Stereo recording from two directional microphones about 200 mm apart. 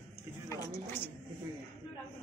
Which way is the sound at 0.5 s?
15° left (ahead or behind).